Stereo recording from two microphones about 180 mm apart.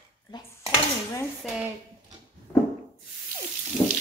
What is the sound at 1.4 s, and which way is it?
Speech, centre (ahead or behind).